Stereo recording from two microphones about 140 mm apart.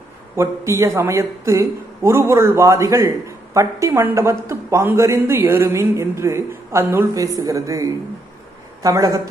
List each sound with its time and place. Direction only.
0.4 s speech: 20° right (ahead or behind)